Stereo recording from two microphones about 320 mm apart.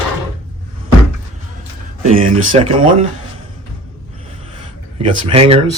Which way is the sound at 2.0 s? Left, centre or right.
Centre.